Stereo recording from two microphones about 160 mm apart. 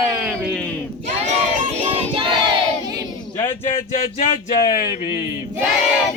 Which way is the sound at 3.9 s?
50° left (ahead or behind).